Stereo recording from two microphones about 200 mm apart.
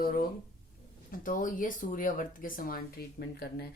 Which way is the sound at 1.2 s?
45° left (ahead or behind).